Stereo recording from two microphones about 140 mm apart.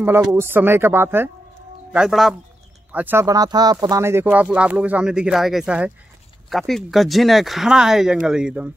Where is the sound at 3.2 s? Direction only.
25° right (ahead or behind); by 8.7 s 5° right (ahead or behind).